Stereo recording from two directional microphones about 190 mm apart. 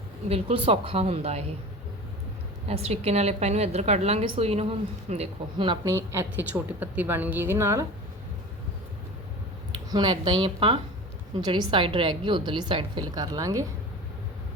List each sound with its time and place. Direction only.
0.3 s a woman's voice: 30° right (ahead or behind)
2.6 s a woman's voice: 35° right (ahead or behind); by 7.9 s 15° right (ahead or behind)
9.9 s a woman's voice: 25° right (ahead or behind)